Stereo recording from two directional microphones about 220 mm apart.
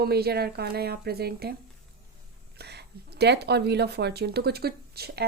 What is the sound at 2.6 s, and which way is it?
Speech, 50° right (ahead or behind).